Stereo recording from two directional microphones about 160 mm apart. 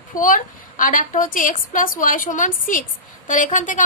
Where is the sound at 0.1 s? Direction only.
55° left (ahead or behind).